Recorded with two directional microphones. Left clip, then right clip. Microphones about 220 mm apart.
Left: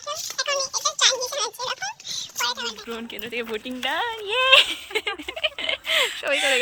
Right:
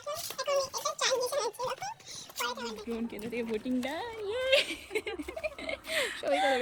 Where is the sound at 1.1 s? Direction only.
10° left (ahead or behind).